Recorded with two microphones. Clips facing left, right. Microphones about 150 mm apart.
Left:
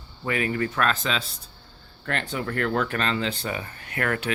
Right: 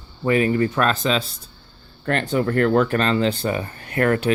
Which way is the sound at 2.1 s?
45° right (ahead or behind).